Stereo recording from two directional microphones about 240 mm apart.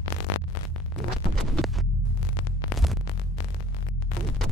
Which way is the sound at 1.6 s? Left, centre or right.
Centre.